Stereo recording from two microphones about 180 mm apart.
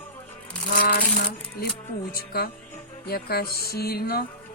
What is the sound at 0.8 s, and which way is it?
Coin, 70° left (ahead or behind).